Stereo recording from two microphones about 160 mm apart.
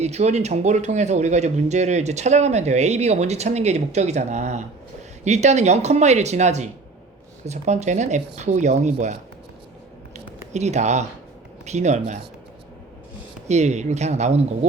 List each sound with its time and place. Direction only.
0.0 s speech: 45° right (ahead or behind)
10.5 s speech: 45° right (ahead or behind)
13.5 s speech: 45° right (ahead or behind)